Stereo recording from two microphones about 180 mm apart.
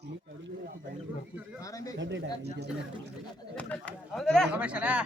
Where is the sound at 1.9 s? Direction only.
90° right.